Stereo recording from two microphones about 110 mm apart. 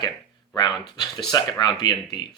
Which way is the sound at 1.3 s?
40° left (ahead or behind).